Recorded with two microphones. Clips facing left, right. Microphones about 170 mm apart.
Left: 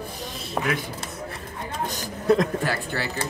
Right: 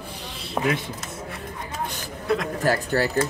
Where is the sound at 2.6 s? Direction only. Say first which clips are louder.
Right 5 dB; 40° right (ahead or behind).